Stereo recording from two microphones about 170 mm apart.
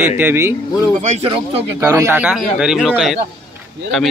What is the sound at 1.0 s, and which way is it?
Speech, 40° right (ahead or behind).